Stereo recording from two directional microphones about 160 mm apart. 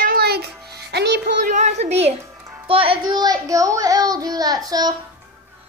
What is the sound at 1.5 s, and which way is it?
Speech, 45° right (ahead or behind).